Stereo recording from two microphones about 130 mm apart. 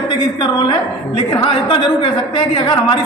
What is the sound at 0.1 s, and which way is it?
A woman's voice, 35° left (ahead or behind).